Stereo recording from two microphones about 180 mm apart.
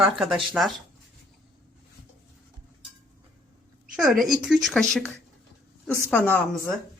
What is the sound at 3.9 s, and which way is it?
A woman's voice, centre (ahead or behind).